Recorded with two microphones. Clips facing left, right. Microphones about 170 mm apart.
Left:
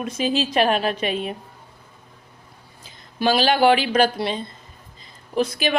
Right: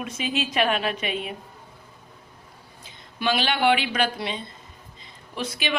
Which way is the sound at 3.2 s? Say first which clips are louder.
Left 6 dB; 35° left (ahead or behind).